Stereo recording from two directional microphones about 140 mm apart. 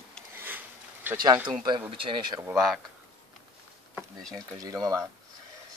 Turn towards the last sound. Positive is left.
turn(degrees=-25)  # may be behind; listen again after turning